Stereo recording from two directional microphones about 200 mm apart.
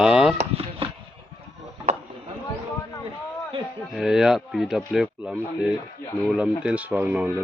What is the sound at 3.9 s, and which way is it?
Speech, centre (ahead or behind).